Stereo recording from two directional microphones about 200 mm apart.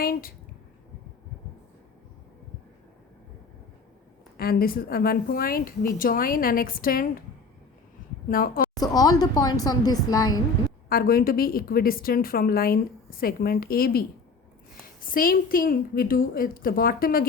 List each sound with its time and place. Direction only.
0.0 s a sound: 45° left (ahead or behind)
4.4 s a woman's voice: 45° left (ahead or behind)
8.3 s a woman's voice: 45° left (ahead or behind)
8.7 s a woman's voice: 20° left (ahead or behind)
10.8 s a woman's voice: 45° left (ahead or behind)
15.0 s a woman's voice: 45° left (ahead or behind)